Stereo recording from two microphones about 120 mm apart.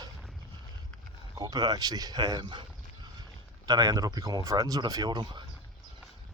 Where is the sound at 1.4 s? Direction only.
35° right (ahead or behind).